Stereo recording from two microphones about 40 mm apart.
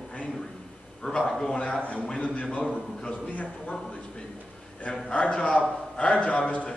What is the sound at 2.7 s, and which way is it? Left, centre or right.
Speech, left.